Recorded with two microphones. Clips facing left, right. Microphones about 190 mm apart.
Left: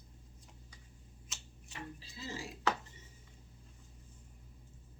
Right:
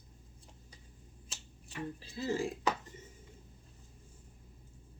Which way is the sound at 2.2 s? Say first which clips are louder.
Right 11 dB; 50° right (ahead or behind).